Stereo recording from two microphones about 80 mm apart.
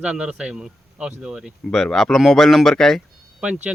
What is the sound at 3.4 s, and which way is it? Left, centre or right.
Speech, centre.